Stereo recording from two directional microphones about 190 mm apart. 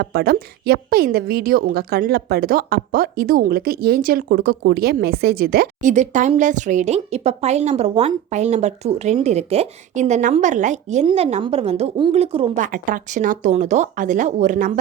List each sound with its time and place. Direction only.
0.0 s a woman's voice: 55° right (ahead or behind)